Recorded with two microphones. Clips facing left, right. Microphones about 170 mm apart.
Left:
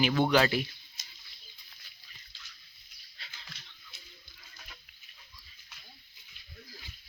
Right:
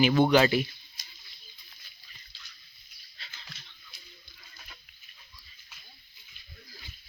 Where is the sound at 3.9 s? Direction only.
25° left (ahead or behind).